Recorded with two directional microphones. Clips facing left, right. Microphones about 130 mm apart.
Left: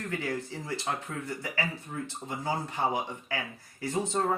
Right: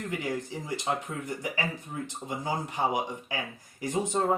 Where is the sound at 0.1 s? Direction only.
15° right (ahead or behind).